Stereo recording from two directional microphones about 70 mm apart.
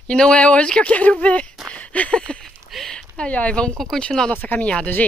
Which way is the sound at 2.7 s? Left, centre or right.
Centre.